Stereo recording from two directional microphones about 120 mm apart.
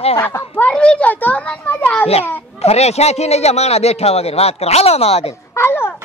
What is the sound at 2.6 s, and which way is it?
A man's voice, 60° left (ahead or behind).